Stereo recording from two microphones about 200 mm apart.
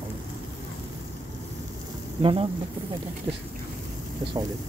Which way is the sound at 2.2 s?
25° right (ahead or behind).